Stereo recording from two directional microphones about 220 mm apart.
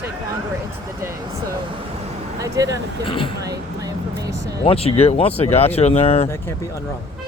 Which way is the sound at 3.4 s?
15° right (ahead or behind).